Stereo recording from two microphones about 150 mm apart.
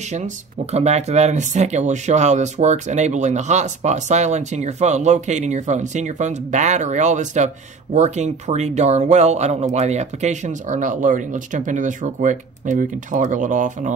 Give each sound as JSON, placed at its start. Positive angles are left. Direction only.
{"t": 0.1, "sound": "speech", "side_deg": -45}